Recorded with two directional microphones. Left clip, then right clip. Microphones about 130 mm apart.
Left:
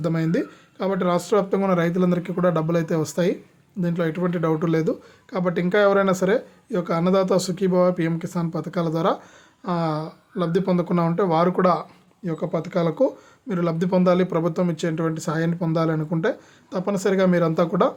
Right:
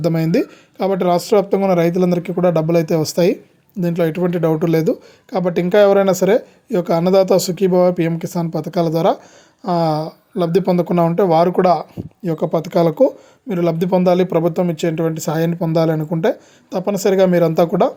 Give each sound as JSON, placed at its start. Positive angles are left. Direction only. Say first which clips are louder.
{"t": 0.0, "sound": "speech", "louder": "right 7 dB", "side_deg": -40}